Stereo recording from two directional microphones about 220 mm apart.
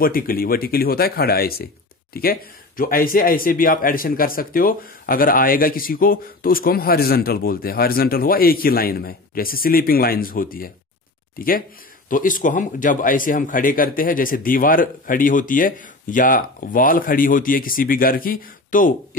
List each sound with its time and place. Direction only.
0.0 s speech: 40° left (ahead or behind)